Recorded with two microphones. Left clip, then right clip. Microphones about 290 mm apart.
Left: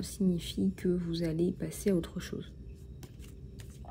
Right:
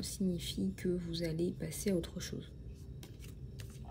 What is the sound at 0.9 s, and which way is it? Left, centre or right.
A woman's voice, centre.